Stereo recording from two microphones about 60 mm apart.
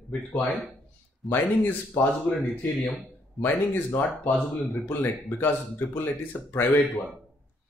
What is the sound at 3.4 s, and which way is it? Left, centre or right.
Speech, left.